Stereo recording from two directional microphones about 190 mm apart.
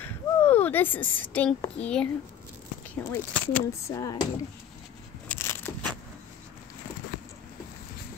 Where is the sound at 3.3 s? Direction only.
10° left (ahead or behind).